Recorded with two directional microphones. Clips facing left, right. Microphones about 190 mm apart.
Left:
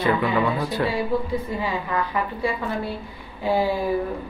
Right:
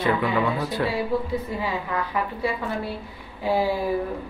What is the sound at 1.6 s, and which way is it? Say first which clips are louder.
A woman's voice: left 2 dB; 5° right (ahead or behind).